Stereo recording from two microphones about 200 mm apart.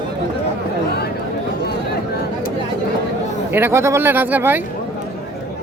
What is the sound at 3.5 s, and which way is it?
Speech, 10° right (ahead or behind).